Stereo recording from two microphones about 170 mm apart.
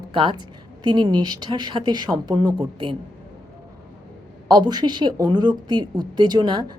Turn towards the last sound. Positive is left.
turn(degrees=-25)  # may be behind; listen again after turning